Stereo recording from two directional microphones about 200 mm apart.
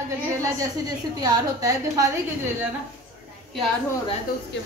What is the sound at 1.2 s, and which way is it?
Speech, 20° right (ahead or behind).